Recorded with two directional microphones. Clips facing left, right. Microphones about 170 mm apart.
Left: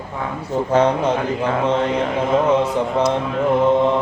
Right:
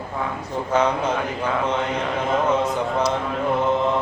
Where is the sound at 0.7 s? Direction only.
30° left (ahead or behind).